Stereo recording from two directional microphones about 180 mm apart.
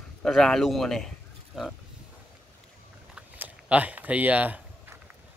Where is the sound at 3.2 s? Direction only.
10° right (ahead or behind).